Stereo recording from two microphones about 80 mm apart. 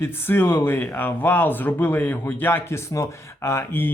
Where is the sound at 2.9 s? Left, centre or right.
Left.